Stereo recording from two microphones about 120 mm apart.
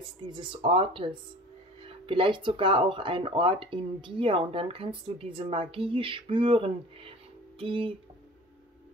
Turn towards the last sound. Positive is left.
turn(degrees=-45)  # may be behind; listen again after turning